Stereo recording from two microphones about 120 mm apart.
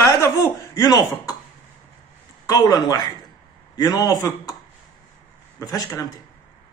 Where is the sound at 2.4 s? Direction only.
30° left (ahead or behind).